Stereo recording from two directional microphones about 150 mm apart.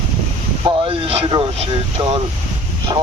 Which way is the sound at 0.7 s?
40° right (ahead or behind).